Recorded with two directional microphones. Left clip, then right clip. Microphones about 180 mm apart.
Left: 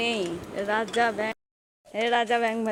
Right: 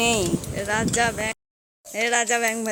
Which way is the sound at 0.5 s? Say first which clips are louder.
Right 1 dB; centre (ahead or behind).